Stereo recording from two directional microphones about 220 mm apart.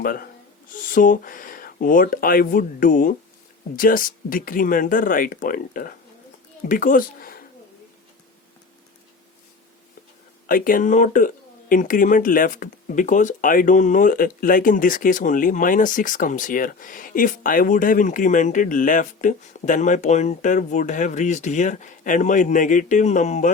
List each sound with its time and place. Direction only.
0.0 s speech: 40° left (ahead or behind)
10.4 s speech: 40° left (ahead or behind)